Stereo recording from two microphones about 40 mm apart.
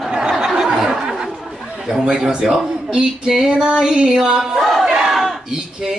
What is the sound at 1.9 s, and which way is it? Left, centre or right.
Speech, centre.